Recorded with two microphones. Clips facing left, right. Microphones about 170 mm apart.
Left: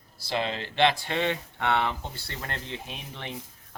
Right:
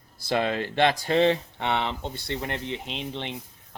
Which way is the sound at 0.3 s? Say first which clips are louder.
Right 5 dB; 50° right (ahead or behind).